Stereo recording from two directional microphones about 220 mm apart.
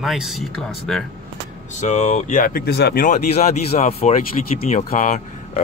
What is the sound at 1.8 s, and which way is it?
Speech, 30° left (ahead or behind).